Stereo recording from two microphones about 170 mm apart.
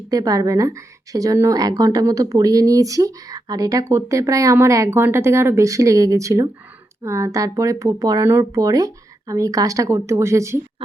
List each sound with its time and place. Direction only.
0.1 s speech: 20° right (ahead or behind)